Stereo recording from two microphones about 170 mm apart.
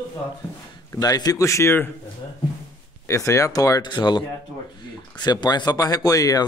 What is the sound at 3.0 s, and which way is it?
Speech, 15° left (ahead or behind).